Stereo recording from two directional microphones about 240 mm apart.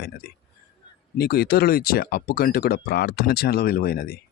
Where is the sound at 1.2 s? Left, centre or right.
Left.